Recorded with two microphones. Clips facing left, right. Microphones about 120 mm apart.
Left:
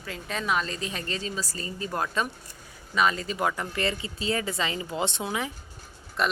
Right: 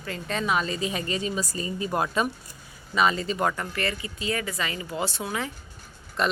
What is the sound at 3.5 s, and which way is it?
Speech, 20° left (ahead or behind).